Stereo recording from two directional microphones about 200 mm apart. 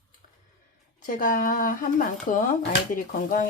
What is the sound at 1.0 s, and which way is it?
Speech, 40° left (ahead or behind).